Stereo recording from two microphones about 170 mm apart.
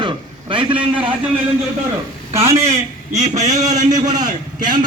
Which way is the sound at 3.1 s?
45° right (ahead or behind).